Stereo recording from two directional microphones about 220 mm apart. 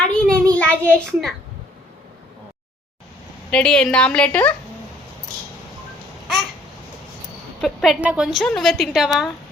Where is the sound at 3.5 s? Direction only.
5° left (ahead or behind).